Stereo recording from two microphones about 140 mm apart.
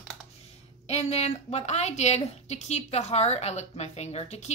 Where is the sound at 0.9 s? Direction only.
50° left (ahead or behind).